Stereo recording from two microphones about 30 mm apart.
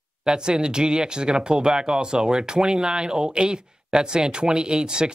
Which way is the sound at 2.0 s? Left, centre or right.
Right.